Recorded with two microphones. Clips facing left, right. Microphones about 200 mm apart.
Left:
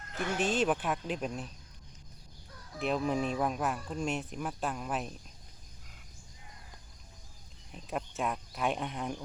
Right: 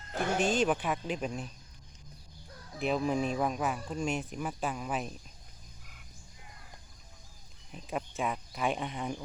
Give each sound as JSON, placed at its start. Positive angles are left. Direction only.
{"t": 0.3, "sound": "speech", "side_deg": 0}
{"t": 2.7, "sound": "speech", "side_deg": 0}
{"t": 7.7, "sound": "speech", "side_deg": 0}